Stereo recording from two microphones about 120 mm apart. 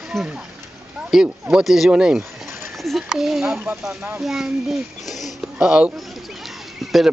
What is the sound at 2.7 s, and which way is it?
Speech, centre (ahead or behind).